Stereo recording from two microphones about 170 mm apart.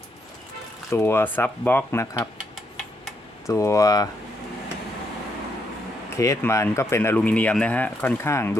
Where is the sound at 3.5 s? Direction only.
20° left (ahead or behind).